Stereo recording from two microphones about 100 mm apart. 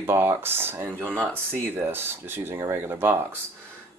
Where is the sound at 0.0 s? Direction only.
25° right (ahead or behind).